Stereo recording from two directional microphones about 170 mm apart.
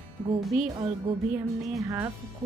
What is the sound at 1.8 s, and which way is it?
Speech, 20° right (ahead or behind).